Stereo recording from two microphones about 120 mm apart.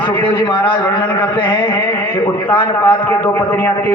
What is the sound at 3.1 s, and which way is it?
Speech, 15° left (ahead or behind).